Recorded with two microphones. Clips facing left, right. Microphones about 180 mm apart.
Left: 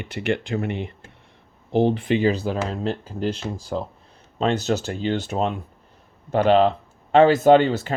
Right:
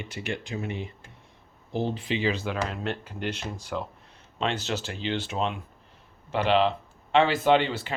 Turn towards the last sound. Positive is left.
turn(degrees=40)  # may be behind; listen again after turning